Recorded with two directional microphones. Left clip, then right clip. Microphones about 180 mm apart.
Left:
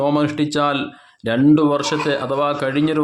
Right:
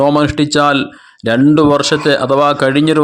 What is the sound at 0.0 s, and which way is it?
Speech, 35° right (ahead or behind).